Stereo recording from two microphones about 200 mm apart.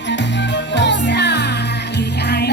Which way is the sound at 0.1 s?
60° left (ahead or behind).